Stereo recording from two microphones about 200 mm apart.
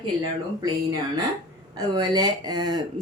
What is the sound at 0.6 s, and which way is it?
Speech, 20° right (ahead or behind).